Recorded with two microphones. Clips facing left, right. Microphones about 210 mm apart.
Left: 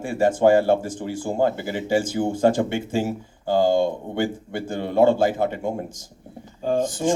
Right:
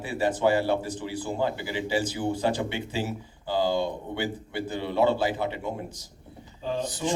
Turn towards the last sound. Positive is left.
turn(degrees=45)  # may be behind; listen again after turning